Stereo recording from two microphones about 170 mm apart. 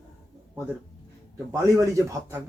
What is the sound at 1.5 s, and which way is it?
Speech, 20° right (ahead or behind).